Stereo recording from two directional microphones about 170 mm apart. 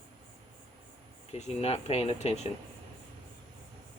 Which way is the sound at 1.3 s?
40° left (ahead or behind).